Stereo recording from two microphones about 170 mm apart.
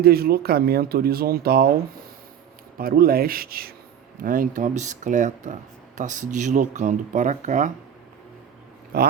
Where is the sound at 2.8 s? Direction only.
60° right (ahead or behind).